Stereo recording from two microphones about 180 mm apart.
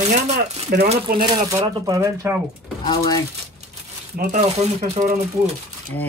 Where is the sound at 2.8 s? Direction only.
20° left (ahead or behind).